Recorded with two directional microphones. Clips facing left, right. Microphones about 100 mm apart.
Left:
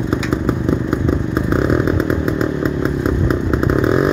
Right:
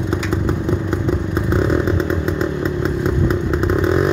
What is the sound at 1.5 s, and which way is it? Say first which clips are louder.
Motorcycle: left 1 dB; 15° left (ahead or behind).